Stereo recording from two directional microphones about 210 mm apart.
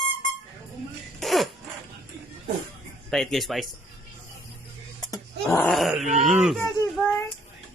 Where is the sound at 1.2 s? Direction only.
Centre (ahead or behind).